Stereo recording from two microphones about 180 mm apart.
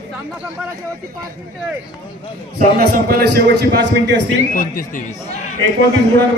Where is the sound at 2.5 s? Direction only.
55° right (ahead or behind).